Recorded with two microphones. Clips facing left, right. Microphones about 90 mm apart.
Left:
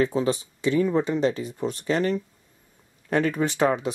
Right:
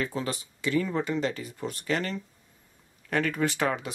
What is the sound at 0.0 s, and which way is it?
Speech, 20° left (ahead or behind).